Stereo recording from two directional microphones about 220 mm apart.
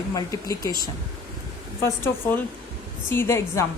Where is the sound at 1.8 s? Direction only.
10° left (ahead or behind).